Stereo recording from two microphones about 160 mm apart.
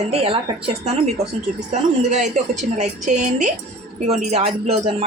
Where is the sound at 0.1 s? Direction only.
35° right (ahead or behind).